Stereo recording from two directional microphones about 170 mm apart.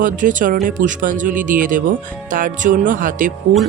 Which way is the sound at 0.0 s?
50° right (ahead or behind).